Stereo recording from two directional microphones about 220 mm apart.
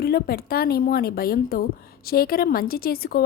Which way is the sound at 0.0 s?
45° left (ahead or behind).